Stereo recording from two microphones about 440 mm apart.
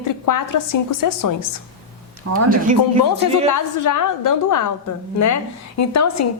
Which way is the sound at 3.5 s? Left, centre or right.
Left.